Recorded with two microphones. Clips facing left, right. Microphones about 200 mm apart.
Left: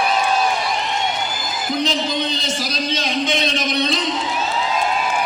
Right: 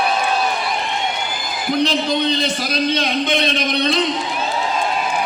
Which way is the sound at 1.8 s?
55° right (ahead or behind).